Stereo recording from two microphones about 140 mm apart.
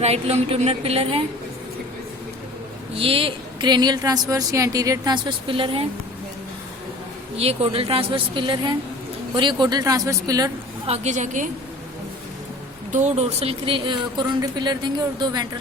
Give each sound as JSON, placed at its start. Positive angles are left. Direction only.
{"t": 0.0, "sound": "a woman's voice", "side_deg": -50}
{"t": 3.0, "sound": "a woman's voice", "side_deg": -40}
{"t": 7.3, "sound": "a woman's voice", "side_deg": -45}
{"t": 10.8, "sound": "a woman's voice", "side_deg": -50}
{"t": 12.9, "sound": "a woman's voice", "side_deg": -55}